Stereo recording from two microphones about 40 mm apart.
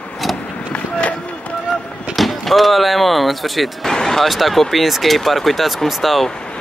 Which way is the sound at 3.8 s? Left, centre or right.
Centre.